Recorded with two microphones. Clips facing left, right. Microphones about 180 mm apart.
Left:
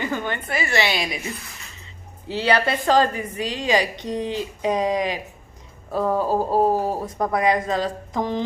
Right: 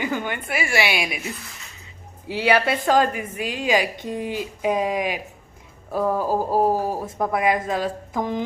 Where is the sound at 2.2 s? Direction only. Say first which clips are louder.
Right 1 dB; 10° right (ahead or behind).